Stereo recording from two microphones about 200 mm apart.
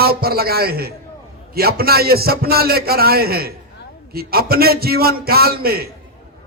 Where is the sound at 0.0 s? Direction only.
50° right (ahead or behind).